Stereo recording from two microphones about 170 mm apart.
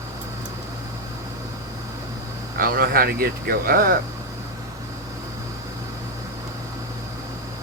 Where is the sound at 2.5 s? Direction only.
60° right (ahead or behind).